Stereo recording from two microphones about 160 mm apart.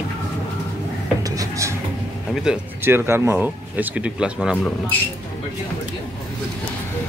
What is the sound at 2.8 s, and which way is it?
Speech, 15° right (ahead or behind).